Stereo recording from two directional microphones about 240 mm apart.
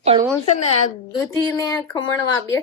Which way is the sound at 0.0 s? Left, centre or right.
Right.